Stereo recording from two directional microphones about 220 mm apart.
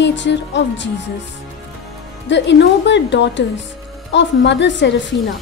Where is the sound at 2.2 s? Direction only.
55° left (ahead or behind).